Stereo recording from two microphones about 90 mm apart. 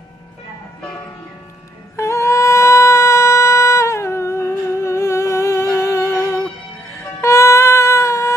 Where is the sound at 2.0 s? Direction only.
30° left (ahead or behind).